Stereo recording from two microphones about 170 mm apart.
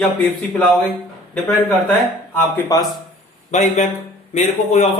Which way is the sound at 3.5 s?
45° left (ahead or behind).